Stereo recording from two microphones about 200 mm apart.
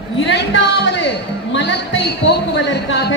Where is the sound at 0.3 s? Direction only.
65° left (ahead or behind).